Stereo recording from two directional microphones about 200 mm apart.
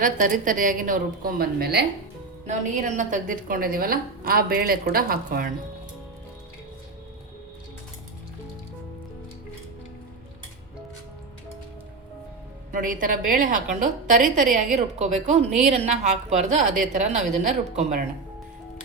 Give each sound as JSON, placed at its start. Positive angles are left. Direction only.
{"t": 0.0, "sound": "a woman's voice", "side_deg": -45}
{"t": 2.5, "sound": "a woman's voice", "side_deg": -40}
{"t": 12.7, "sound": "a woman's voice", "side_deg": -45}